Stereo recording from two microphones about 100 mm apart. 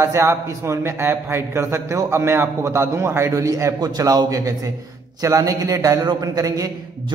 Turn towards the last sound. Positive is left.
turn(degrees=-35)  # may be behind; listen again after turning